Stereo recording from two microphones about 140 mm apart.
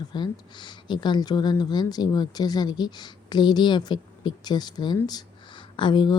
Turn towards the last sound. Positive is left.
turn(degrees=35)  # may be behind; listen again after turning